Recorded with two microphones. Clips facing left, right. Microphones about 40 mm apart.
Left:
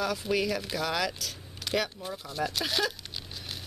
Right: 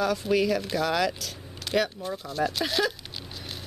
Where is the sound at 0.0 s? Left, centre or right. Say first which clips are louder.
Right 4 dB; centre.